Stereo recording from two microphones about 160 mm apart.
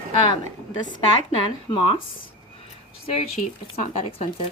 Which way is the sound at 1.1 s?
30° left (ahead or behind).